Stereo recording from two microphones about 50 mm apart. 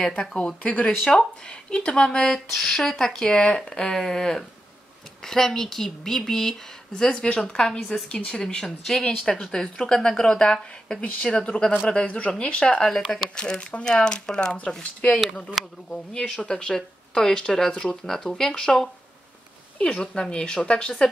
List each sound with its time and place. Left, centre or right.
0.2 s speech: centre
0.6 s speech: left
15.6 s speech: centre
15.9 s speech: centre